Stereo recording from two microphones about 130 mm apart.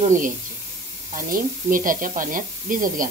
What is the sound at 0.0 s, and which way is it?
Speech, 75° right (ahead or behind).